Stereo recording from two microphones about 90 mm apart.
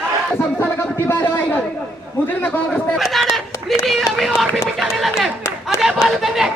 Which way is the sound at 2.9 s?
Centre (ahead or behind).